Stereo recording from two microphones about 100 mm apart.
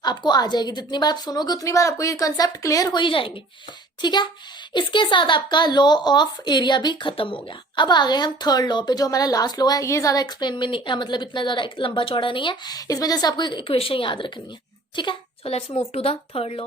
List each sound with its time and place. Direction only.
0.0 s a woman's voice: 45° left (ahead or behind)
3.0 s speech: 60° left (ahead or behind)
4.0 s speech: 50° left (ahead or behind)
12.7 s speech: 40° left (ahead or behind)
15.4 s speech: 85° left